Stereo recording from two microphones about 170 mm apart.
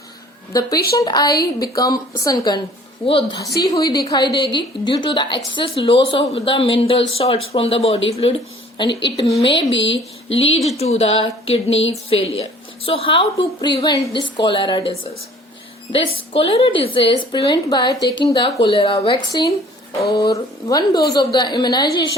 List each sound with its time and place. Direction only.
0.9 s a woman's voice: 25° left (ahead or behind)
8.9 s speech: 90° left
9.1 s a woman's voice: 20° left (ahead or behind)
9.4 s speech: 30° left (ahead or behind)
9.7 s speech: 90° left
10.2 s a woman's voice: 35° left (ahead or behind)
20.0 s speech: 65° left (ahead or behind)
20.3 s a woman's voice: 20° left (ahead or behind)